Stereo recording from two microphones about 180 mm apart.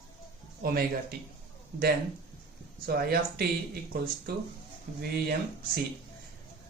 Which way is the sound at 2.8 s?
55° right (ahead or behind).